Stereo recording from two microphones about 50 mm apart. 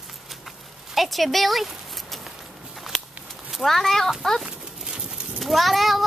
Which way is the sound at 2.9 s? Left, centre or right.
Centre.